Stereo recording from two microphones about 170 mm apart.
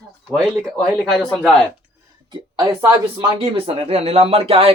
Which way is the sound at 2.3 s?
30° right (ahead or behind).